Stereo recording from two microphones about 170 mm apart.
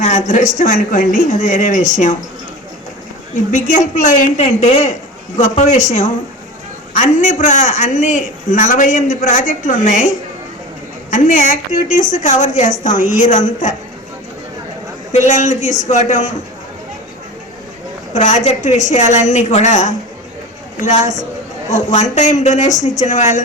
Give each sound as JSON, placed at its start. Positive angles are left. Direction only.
{"t": 0.0, "sound": "a man's voice", "side_deg": 45}
{"t": 3.5, "sound": "a man's voice", "side_deg": 50}
{"t": 15.1, "sound": "a man's voice", "side_deg": 45}
{"t": 18.1, "sound": "a man's voice", "side_deg": 45}